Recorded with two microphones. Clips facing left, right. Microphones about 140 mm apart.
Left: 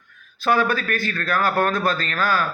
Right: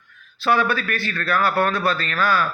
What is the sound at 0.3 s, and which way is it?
A man's voice, 45° left (ahead or behind).